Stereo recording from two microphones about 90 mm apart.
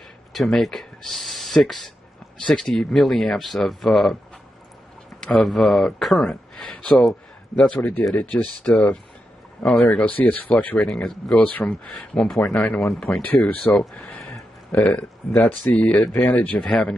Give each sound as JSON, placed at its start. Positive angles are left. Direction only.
{"t": 0.3, "sound": "speech", "side_deg": 0}
{"t": 5.2, "sound": "a man's voice", "side_deg": 5}